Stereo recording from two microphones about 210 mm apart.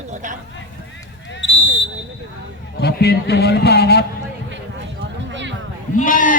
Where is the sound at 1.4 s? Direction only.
60° left (ahead or behind).